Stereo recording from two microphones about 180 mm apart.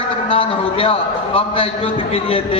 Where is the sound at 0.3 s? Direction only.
30° left (ahead or behind).